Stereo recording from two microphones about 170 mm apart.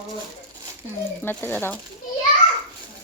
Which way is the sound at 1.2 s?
10° left (ahead or behind).